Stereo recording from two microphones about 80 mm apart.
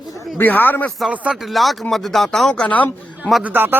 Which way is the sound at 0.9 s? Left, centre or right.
Centre.